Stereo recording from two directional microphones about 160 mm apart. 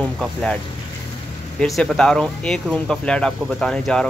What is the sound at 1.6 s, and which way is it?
Speech, centre (ahead or behind).